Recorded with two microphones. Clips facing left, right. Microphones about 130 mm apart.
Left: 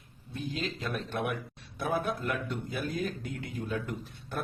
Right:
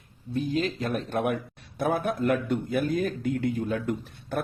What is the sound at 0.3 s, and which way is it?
A man's voice, 45° right (ahead or behind).